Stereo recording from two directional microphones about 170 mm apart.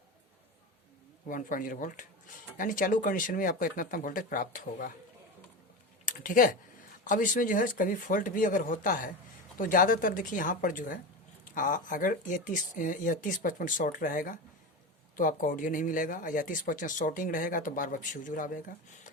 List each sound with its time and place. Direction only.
1.3 s speech: 50° left (ahead or behind)
6.1 s speech: 50° left (ahead or behind)